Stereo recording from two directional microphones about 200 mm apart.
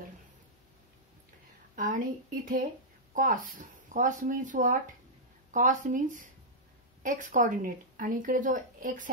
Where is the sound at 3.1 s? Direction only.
40° right (ahead or behind).